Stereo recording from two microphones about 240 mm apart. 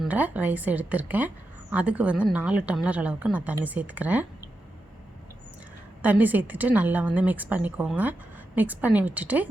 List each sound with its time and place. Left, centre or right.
0.0 s a woman's voice: centre
6.0 s a woman's voice: centre